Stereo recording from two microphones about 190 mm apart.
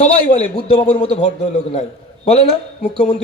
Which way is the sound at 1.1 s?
35° left (ahead or behind).